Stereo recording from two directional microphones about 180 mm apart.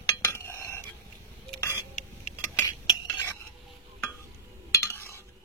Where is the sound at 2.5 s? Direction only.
15° left (ahead or behind).